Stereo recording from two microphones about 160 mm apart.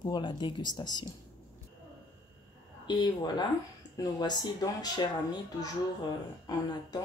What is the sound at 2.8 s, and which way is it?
Speech, 25° left (ahead or behind).